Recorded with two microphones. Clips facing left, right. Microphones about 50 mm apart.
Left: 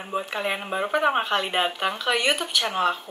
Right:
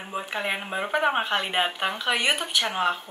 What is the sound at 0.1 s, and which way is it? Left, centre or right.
Speech, centre.